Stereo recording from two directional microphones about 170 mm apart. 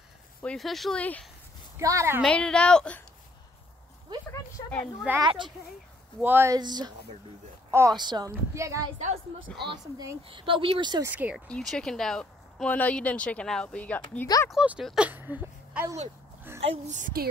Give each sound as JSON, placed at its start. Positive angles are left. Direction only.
{"t": 0.4, "sound": "speech", "side_deg": 5}
{"t": 1.8, "sound": "speech", "side_deg": -20}
{"t": 2.2, "sound": "speech", "side_deg": 5}
{"t": 5.2, "sound": "speech", "side_deg": -30}
{"t": 6.2, "sound": "speech", "side_deg": -15}
{"t": 11.1, "sound": "speech", "side_deg": -10}
{"t": 11.4, "sound": "speech", "side_deg": 5}
{"t": 14.2, "sound": "speech", "side_deg": 20}
{"t": 14.5, "sound": "speech", "side_deg": -5}
{"t": 16.7, "sound": "a woman's voice", "side_deg": -45}